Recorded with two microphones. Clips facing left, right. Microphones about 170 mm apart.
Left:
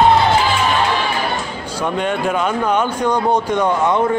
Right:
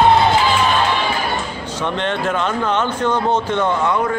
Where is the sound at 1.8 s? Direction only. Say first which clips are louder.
Left 2 dB; 10° left (ahead or behind).